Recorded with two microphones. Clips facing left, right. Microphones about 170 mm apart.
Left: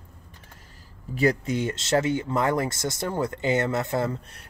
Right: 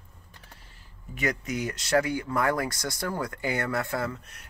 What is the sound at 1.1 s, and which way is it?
Speech, 30° left (ahead or behind).